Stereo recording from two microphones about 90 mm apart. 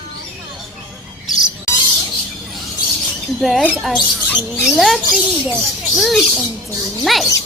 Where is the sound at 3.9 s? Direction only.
10° left (ahead or behind).